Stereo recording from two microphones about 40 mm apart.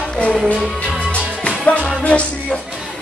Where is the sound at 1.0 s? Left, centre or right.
Left.